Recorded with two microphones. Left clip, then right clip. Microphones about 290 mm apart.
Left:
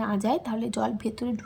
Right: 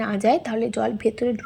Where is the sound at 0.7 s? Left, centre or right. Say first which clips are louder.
Right 5 dB; centre.